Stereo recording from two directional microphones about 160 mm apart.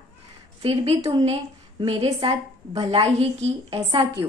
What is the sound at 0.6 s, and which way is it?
A woman's voice, 35° right (ahead or behind).